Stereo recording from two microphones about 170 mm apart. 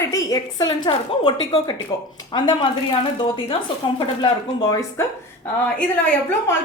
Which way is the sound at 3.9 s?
25° left (ahead or behind).